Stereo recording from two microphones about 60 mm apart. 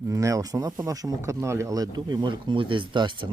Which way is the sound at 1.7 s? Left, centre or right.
Right.